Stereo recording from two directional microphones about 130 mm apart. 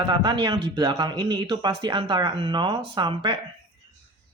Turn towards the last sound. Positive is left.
turn(degrees=-35)  # may be behind; listen again after turning